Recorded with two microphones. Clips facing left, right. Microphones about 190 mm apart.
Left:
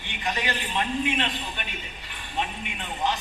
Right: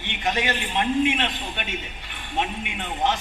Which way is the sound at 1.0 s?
60° right (ahead or behind).